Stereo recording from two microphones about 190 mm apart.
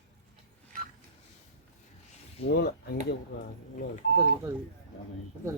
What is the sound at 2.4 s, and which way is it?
Speech, 65° left (ahead or behind).